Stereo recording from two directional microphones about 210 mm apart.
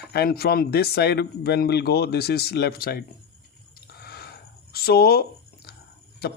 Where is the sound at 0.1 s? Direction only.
50° left (ahead or behind).